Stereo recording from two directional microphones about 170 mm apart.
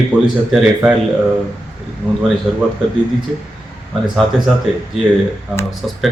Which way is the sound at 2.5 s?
5° right (ahead or behind).